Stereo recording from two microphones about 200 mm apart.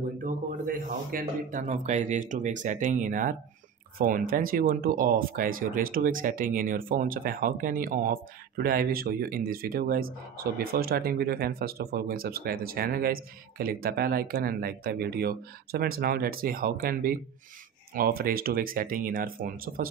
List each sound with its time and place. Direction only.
0.2 s a man's voice: 40° right (ahead or behind)